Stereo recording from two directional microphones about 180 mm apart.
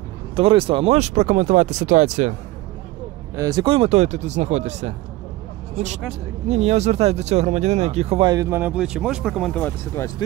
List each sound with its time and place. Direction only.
0.4 s speech: 30° right (ahead or behind)
3.3 s speech: 20° right (ahead or behind); by 4.9 s 40° right (ahead or behind)
6.5 s speech: 40° right (ahead or behind)
8.3 s speech: 15° right (ahead or behind); by 10.1 s 10° left (ahead or behind)